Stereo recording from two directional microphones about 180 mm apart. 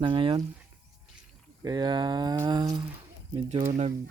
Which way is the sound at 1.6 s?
20° right (ahead or behind).